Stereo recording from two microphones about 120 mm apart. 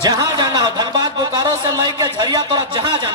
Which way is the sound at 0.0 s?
35° right (ahead or behind).